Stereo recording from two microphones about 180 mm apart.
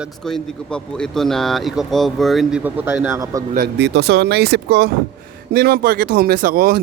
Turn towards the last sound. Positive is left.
turn(degrees=-55)  # may be behind; listen again after turning